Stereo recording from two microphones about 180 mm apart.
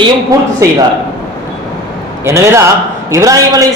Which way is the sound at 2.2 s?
15° right (ahead or behind).